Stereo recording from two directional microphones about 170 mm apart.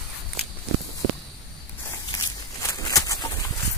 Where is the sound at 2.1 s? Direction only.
20° left (ahead or behind).